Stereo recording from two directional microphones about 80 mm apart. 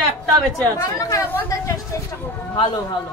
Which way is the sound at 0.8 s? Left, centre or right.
Left.